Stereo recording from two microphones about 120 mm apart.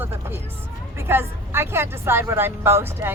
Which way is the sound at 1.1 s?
20° right (ahead or behind).